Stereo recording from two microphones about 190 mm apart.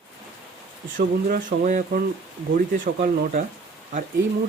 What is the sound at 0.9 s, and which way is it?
Speech, 45° right (ahead or behind).